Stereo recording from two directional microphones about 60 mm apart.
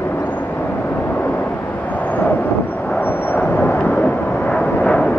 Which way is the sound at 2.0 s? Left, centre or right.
Left.